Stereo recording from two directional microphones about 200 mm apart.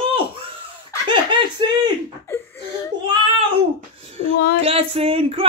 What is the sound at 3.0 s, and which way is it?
Child singing, 25° right (ahead or behind).